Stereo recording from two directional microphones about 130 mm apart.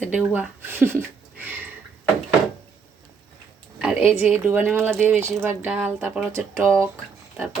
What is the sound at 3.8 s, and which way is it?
A woman's voice, 10° right (ahead or behind).